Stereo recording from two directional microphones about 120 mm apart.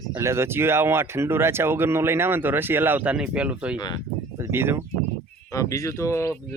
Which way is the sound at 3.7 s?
35° left (ahead or behind).